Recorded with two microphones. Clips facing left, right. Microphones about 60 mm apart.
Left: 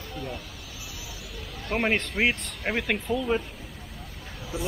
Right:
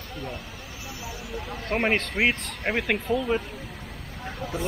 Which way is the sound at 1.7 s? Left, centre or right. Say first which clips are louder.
Right 1 dB; centre.